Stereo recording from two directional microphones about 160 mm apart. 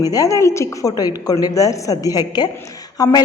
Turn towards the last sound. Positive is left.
turn(degrees=25)  # may be behind; listen again after turning